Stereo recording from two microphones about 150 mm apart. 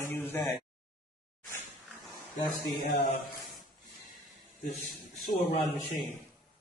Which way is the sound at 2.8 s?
65° left (ahead or behind).